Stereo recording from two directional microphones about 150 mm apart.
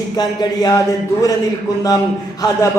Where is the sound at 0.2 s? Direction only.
25° left (ahead or behind).